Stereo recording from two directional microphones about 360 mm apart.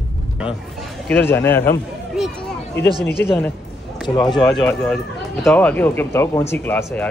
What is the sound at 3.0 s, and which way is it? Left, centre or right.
Speech, left.